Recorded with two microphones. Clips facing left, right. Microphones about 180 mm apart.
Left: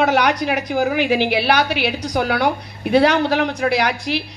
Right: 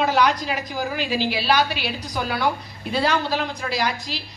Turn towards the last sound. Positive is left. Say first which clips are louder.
# left 6 dB
turn(degrees=65)  # may be behind; listen again after turning